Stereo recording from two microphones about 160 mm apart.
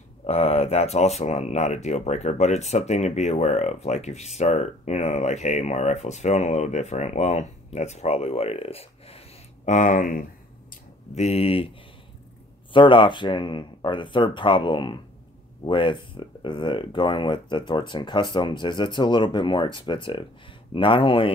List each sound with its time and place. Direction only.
0.3 s speech: 40° left (ahead or behind)
9.7 s speech: 55° left (ahead or behind)
11.1 s speech: 40° left (ahead or behind)
12.7 s speech: 30° left (ahead or behind)